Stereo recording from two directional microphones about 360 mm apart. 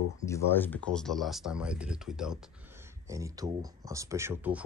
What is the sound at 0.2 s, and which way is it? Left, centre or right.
Speech, centre.